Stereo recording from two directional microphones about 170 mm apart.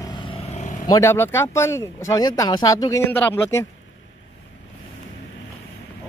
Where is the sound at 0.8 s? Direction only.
20° left (ahead or behind).